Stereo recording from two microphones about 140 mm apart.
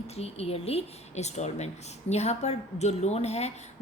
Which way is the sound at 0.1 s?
45° left (ahead or behind).